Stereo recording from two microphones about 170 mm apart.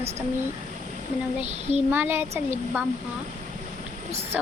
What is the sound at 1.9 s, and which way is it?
Speech, 15° right (ahead or behind).